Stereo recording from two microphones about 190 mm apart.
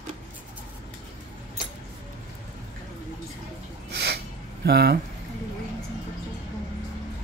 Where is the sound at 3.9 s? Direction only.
60° right (ahead or behind).